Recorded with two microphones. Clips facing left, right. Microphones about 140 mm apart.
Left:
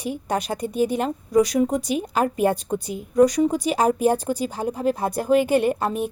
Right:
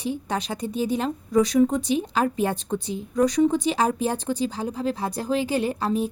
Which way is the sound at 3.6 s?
45° left (ahead or behind).